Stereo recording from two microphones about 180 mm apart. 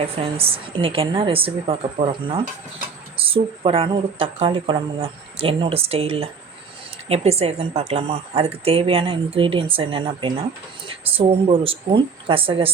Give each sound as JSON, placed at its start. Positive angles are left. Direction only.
{"t": 0.0, "sound": "a woman's voice", "side_deg": -35}